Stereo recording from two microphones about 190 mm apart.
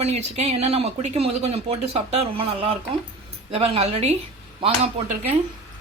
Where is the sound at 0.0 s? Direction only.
35° right (ahead or behind).